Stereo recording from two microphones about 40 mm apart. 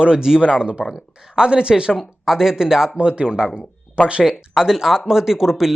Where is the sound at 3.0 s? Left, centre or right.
Right.